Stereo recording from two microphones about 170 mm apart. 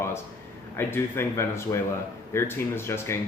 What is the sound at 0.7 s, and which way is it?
Speech, 15° left (ahead or behind).